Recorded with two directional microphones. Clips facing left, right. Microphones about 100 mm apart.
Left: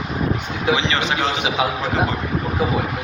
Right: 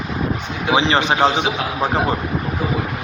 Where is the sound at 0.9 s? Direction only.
20° right (ahead or behind).